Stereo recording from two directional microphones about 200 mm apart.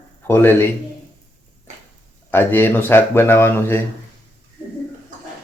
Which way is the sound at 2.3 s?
10° left (ahead or behind).